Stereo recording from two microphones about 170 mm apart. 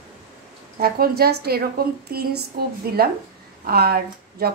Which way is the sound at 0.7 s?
60° right (ahead or behind).